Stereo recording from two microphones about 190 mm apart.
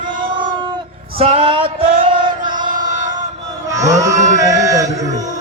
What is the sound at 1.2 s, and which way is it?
Music, 30° right (ahead or behind).